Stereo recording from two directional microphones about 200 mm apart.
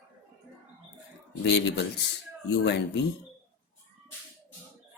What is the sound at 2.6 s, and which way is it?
Speech, 60° left (ahead or behind).